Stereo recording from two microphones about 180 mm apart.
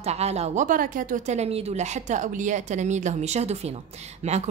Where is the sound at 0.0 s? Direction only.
35° right (ahead or behind).